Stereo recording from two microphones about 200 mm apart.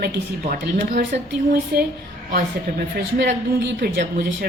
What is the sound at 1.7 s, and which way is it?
Speech, 55° right (ahead or behind).